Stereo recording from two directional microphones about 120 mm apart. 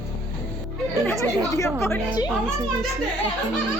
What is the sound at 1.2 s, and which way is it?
Speech, 25° left (ahead or behind).